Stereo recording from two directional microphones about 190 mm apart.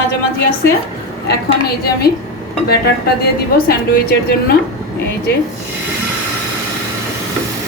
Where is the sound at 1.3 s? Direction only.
55° left (ahead or behind).